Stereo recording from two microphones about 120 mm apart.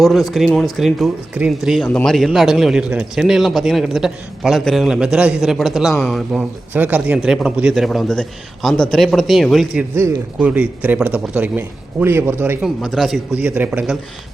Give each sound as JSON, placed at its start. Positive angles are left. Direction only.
{"t": 0.0, "sound": "a man's voice", "side_deg": 0}
{"t": 6.7, "sound": "a man's voice", "side_deg": -15}
{"t": 9.9, "sound": "a man's voice", "side_deg": -20}
{"t": 12.6, "sound": "a man's voice", "side_deg": 0}